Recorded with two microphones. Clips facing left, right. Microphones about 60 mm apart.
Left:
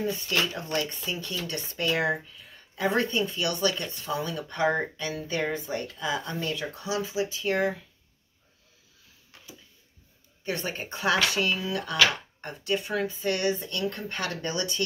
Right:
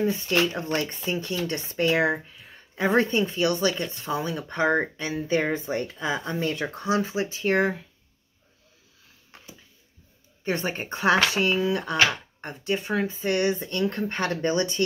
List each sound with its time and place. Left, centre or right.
0.0 s speech: right
1.1 s speech: centre; by 7.8 s right
10.4 s speech: right